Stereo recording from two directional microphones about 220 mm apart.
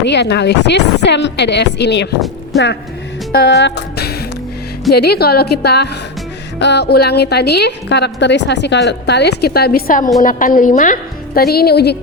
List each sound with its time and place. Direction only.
0.0 s a woman's voice: 50° left (ahead or behind)
2.5 s speech: centre (ahead or behind)
3.3 s a woman's voice: 50° left (ahead or behind)